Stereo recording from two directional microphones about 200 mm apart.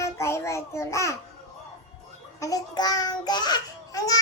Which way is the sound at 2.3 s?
15° left (ahead or behind).